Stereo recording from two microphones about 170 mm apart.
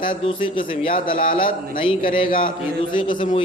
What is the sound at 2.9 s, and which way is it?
Speech, 30° left (ahead or behind).